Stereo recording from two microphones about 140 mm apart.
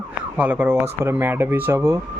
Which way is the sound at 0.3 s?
10° right (ahead or behind).